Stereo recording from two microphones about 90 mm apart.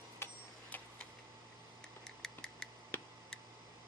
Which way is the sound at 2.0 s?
5° left (ahead or behind).